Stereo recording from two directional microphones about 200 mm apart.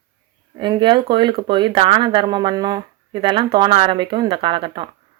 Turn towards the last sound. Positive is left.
turn(degrees=-25)  # may be behind; listen again after turning